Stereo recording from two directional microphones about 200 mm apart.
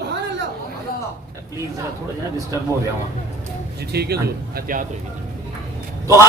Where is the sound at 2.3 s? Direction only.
15° right (ahead or behind).